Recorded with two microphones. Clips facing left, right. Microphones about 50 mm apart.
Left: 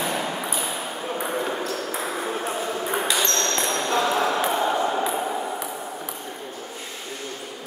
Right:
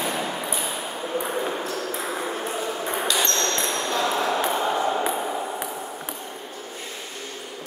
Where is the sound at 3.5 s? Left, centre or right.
Centre.